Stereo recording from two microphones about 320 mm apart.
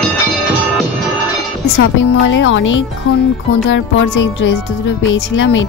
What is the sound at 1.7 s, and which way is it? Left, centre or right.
Speech, left.